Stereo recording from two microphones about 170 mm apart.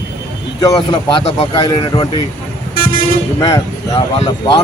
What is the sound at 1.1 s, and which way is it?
Speech, 35° left (ahead or behind).